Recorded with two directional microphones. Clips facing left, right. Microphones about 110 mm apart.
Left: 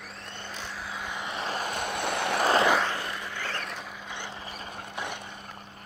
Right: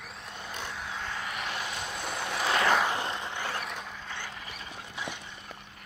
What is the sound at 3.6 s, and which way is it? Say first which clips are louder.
Vehicle: even; centre (ahead or behind).